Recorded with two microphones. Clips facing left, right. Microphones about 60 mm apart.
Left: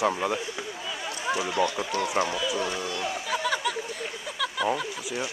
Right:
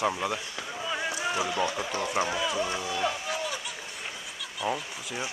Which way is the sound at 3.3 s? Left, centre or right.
Left.